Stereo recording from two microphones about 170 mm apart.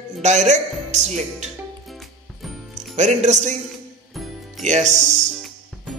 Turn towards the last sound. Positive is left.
turn(degrees=-45)  # may be behind; listen again after turning